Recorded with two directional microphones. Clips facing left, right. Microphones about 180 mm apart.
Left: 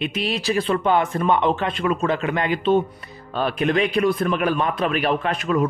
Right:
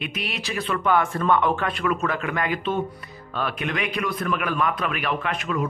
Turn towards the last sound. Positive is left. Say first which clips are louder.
# left 5 dB
turn(degrees=35)  # may be behind; listen again after turning